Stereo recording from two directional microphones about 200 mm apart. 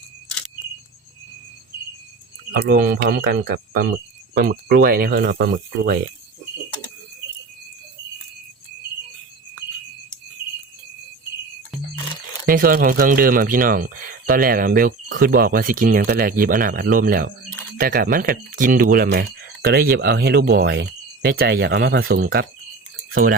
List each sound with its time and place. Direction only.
2.5 s speech: 50° right (ahead or behind)
12.5 s speech: 45° right (ahead or behind)